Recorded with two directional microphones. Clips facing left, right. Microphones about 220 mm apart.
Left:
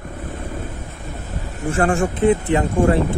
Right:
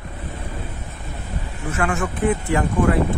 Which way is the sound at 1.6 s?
30° left (ahead or behind).